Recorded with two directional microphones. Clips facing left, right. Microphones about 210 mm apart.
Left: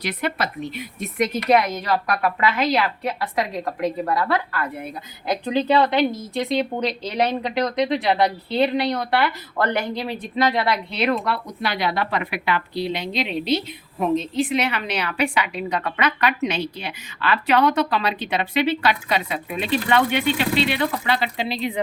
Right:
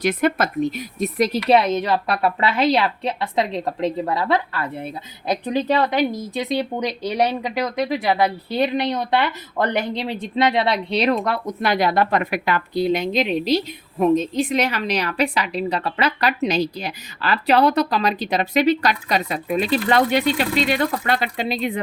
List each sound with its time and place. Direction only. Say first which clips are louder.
0.0 s a woman's voice: right 6 dB; 50° right (ahead or behind)